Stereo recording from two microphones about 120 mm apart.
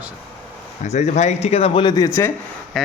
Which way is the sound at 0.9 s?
70° left (ahead or behind).